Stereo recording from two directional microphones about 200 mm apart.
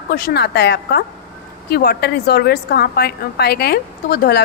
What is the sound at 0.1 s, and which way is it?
A woman's voice, 50° left (ahead or behind).